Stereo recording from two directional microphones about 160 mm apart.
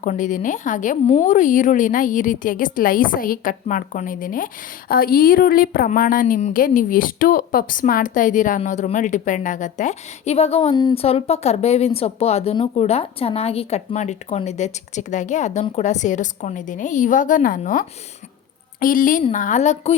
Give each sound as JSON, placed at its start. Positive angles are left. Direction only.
{"t": 0.0, "sound": "a woman's voice", "side_deg": 50}
{"t": 10.8, "sound": "a woman's voice", "side_deg": 25}
{"t": 11.0, "sound": "a woman's voice", "side_deg": 40}